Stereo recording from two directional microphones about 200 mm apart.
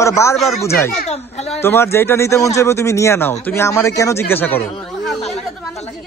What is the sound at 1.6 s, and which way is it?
A woman's voice, 10° left (ahead or behind).